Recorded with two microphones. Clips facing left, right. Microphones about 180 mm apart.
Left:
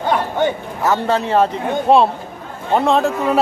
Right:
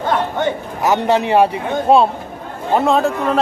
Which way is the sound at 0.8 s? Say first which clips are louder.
Right 2 dB; 20° right (ahead or behind).